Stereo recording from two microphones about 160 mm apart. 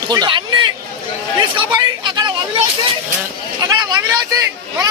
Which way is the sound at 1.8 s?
25° right (ahead or behind).